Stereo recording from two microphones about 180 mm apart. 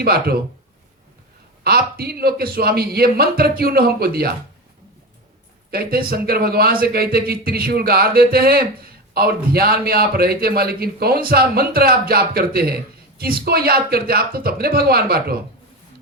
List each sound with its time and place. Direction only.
0.0 s speech: 60° right (ahead or behind)
1.6 s speech: 60° right (ahead or behind)
5.7 s speech: 55° right (ahead or behind)